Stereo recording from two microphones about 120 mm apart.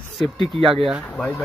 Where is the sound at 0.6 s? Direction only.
50° right (ahead or behind).